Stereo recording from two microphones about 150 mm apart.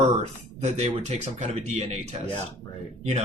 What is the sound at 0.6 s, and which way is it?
Speech, 45° right (ahead or behind).